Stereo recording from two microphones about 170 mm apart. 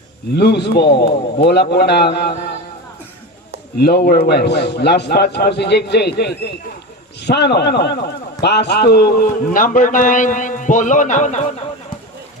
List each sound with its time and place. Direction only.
0.3 s a man's voice: 75° left (ahead or behind)
3.8 s a man's voice: 70° left (ahead or behind); by 11.5 s 45° left (ahead or behind)